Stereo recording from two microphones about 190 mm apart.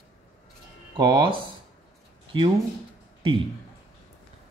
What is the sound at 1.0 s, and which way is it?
Speech, 25° right (ahead or behind).